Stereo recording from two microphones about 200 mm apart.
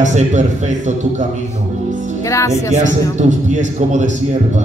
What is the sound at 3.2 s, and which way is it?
Speech, 35° right (ahead or behind).